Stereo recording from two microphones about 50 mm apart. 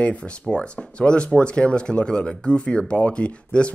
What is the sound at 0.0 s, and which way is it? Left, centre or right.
Speech, left.